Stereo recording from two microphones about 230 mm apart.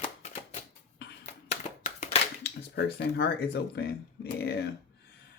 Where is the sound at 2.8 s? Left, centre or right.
Left.